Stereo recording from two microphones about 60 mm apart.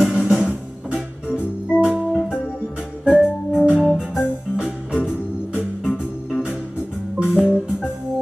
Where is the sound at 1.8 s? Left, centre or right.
Centre.